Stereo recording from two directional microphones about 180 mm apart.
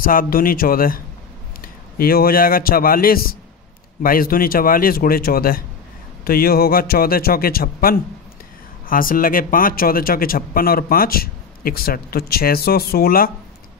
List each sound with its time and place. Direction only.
0.0 s a man's voice: 50° left (ahead or behind)